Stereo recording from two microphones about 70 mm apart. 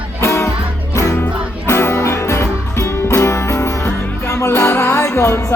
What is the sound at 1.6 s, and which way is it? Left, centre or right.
Music, left.